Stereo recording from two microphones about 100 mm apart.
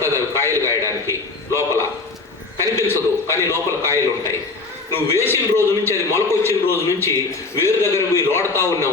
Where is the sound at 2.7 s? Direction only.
25° left (ahead or behind).